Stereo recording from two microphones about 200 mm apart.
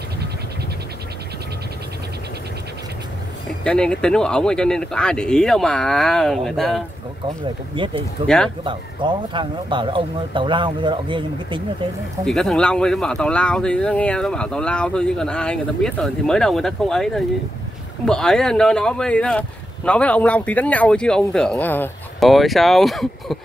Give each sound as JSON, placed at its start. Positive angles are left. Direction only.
{"t": 3.6, "sound": "speech", "side_deg": 5}
{"t": 7.9, "sound": "speech", "side_deg": 5}
{"t": 8.6, "sound": "speech", "side_deg": -25}
{"t": 12.3, "sound": "speech", "side_deg": 0}